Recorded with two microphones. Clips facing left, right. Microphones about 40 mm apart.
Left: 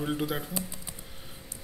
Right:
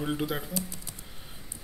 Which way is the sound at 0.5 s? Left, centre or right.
Centre.